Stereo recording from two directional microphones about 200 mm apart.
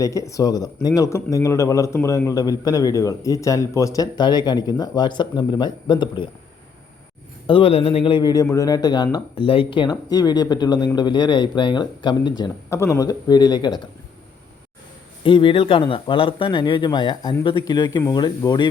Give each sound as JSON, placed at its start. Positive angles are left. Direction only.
{"t": 0.0, "sound": "speech", "side_deg": 15}
{"t": 7.4, "sound": "speech", "side_deg": 25}
{"t": 15.2, "sound": "speech", "side_deg": 25}